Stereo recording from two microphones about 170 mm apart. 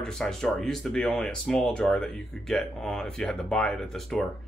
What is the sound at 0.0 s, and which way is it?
Speech, 5° left (ahead or behind).